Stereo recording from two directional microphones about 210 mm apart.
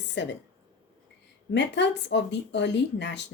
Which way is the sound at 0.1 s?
55° left (ahead or behind).